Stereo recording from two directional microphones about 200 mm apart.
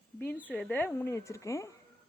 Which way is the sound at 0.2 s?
10° left (ahead or behind).